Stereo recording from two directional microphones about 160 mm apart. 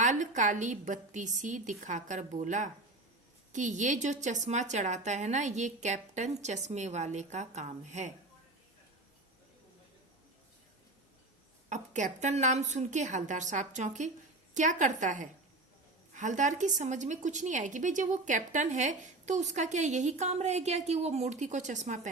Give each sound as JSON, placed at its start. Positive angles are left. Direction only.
{"t": 0.0, "sound": "a woman's voice", "side_deg": -50}
{"t": 11.7, "sound": "a woman's voice", "side_deg": -50}